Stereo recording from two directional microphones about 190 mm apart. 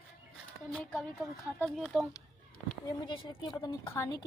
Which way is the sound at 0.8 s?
Centre (ahead or behind).